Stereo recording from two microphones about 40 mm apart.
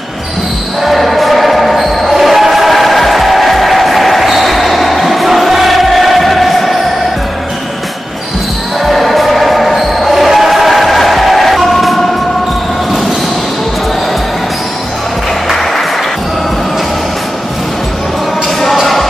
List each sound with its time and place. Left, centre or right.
0.8 s basketball bounce: centre
8.8 s basketball bounce: centre
18.6 s music: centre